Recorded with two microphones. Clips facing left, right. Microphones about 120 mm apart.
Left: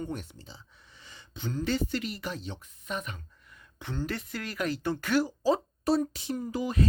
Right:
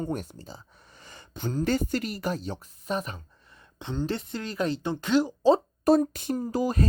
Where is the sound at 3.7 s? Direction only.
20° right (ahead or behind).